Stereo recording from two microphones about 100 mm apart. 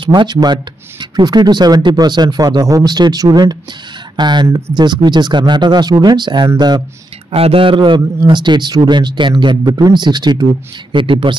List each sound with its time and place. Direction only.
0.0 s speech: 50° right (ahead or behind)
4.5 s speech: 25° right (ahead or behind)
4.7 s speech: 45° right (ahead or behind)
7.3 s speech: 70° right (ahead or behind)